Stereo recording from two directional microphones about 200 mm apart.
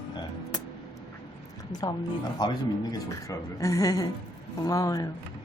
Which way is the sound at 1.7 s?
20° left (ahead or behind).